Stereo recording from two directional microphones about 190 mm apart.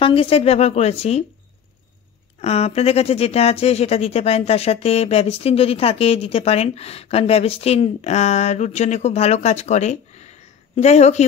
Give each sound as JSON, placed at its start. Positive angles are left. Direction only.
{"t": 0.0, "sound": "speech", "side_deg": 30}
{"t": 2.4, "sound": "speech", "side_deg": 35}